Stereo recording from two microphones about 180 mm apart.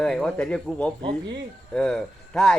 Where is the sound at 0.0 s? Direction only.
5° left (ahead or behind).